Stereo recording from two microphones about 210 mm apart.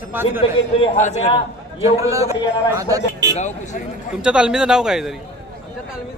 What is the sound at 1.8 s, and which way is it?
A man's voice, 15° right (ahead or behind).